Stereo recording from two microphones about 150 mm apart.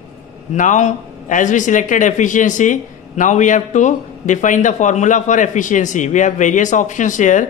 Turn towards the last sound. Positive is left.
turn(degrees=55)  # may be behind; listen again after turning